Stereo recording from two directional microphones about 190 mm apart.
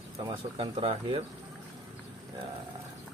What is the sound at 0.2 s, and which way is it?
Speech, 25° right (ahead or behind).